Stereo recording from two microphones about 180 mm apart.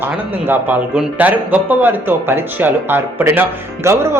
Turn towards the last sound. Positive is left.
turn(degrees=-15)  # may be behind; listen again after turning